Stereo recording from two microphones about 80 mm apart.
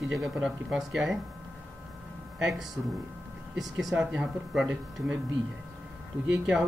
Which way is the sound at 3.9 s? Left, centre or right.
Centre.